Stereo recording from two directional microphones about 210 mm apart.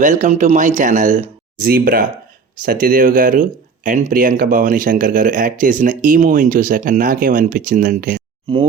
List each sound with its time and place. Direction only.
0.0 s speech: 35° right (ahead or behind)
8.5 s speech: 25° right (ahead or behind)